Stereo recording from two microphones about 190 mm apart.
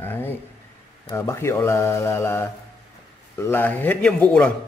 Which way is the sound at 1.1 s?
15° left (ahead or behind).